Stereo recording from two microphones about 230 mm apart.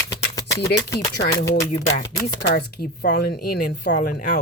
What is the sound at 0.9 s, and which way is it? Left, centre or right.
Speech, left.